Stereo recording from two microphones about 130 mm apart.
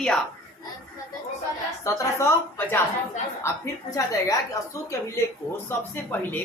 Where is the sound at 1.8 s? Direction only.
25° left (ahead or behind).